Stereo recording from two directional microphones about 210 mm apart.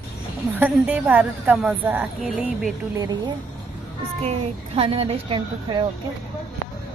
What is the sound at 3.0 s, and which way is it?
Speech, 20° right (ahead or behind).